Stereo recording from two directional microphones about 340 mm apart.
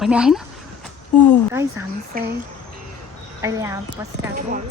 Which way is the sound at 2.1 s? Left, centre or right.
Right.